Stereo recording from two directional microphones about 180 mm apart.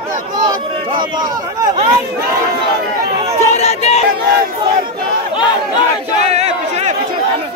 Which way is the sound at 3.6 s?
35° left (ahead or behind).